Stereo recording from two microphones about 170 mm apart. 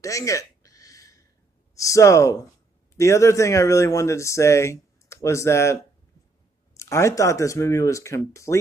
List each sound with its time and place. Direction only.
0.0 s a sound: 20° left (ahead or behind)
1.8 s speech: 20° left (ahead or behind)
6.8 s speech: 15° left (ahead or behind)